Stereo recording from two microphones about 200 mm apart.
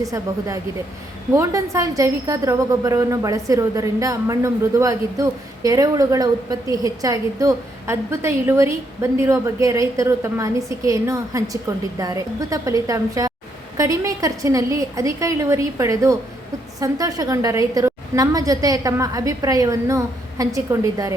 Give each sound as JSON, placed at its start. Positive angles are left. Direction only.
{"t": 0.0, "sound": "a woman's voice", "side_deg": -15}